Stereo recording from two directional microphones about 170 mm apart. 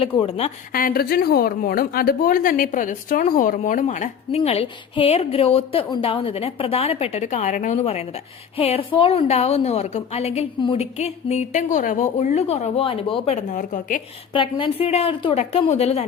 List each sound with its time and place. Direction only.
0.0 s a woman's voice: 30° left (ahead or behind)
0.7 s a woman's voice: 60° left (ahead or behind)
14.3 s a woman's voice: 30° left (ahead or behind)